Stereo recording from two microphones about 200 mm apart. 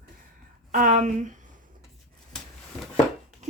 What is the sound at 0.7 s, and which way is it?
Speech, 40° right (ahead or behind).